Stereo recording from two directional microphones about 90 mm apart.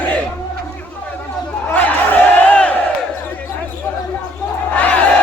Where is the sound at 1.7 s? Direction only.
20° left (ahead or behind).